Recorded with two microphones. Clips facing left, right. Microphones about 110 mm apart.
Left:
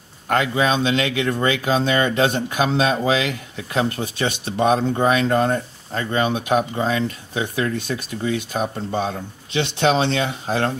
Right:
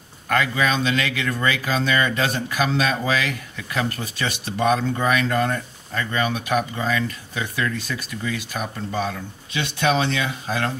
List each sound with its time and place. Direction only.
0.3 s speech: 25° left (ahead or behind)